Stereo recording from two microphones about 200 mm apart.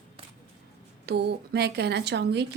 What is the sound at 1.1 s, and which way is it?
Speech, 55° right (ahead or behind).